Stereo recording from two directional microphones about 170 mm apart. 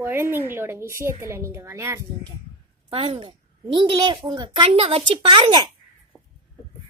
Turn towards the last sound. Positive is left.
turn(degrees=-5)  # may be behind; listen again after turning